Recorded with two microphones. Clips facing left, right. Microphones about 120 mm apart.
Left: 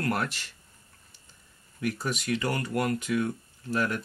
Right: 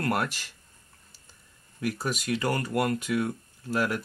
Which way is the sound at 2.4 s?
35° right (ahead or behind).